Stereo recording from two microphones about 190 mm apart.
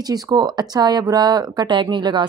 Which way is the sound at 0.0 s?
20° right (ahead or behind).